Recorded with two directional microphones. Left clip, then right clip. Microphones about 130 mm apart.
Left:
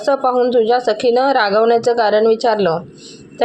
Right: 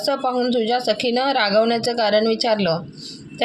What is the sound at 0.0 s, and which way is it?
A woman's voice, 20° left (ahead or behind).